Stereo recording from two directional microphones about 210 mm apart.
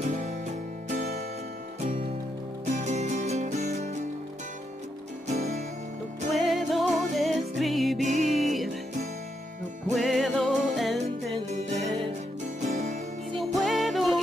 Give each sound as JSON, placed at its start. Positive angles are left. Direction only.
{"t": 0.0, "sound": "music", "side_deg": -35}
{"t": 1.8, "sound": "music", "side_deg": -25}
{"t": 5.3, "sound": "music", "side_deg": -35}
{"t": 6.3, "sound": "music", "side_deg": 0}
{"t": 8.0, "sound": "music", "side_deg": -35}
{"t": 8.3, "sound": "music", "side_deg": 0}
{"t": 9.9, "sound": "music", "side_deg": 0}
{"t": 11.5, "sound": "music", "side_deg": -35}
{"t": 13.6, "sound": "music", "side_deg": 0}